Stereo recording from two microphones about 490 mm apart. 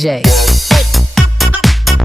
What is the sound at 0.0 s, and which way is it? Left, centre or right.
Music, centre.